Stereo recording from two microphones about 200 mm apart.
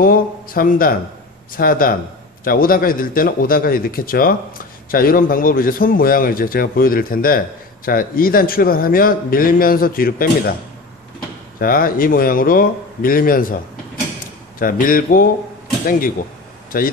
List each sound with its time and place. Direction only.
0.0 s a man's voice: 45° left (ahead or behind)
11.6 s a man's voice: 45° left (ahead or behind)
14.6 s a man's voice: 45° left (ahead or behind)
16.7 s a man's voice: 45° left (ahead or behind)